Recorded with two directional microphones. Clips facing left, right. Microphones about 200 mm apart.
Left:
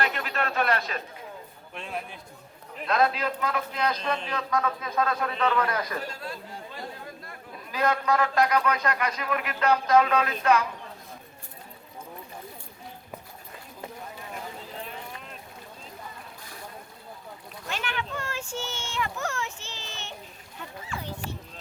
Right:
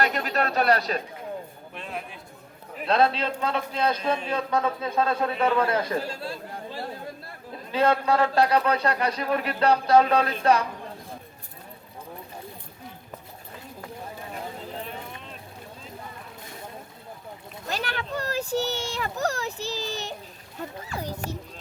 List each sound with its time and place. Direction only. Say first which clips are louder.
0.0 s speech: right 4 dB; 40° right (ahead or behind)
1.7 s a man's voice: left 1 dB; centre (ahead or behind)
2.8 s a man's voice: right 2 dB; 30° right (ahead or behind)
4.0 s a man's voice: right 3 dB; 10° right (ahead or behind)
4.3 s a man's voice: right 3 dB; 30° right (ahead or behind)
16.4 s vehicle: right 3 dB; 25° right (ahead or behind)
17.7 s a man's voice: right 3 dB; 35° right (ahead or behind)